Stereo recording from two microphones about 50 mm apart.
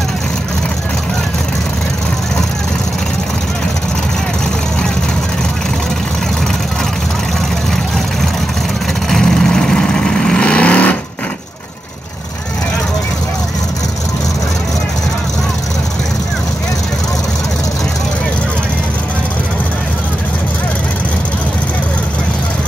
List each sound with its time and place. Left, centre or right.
9.1 s vehicle: centre
10.4 s vehicle: left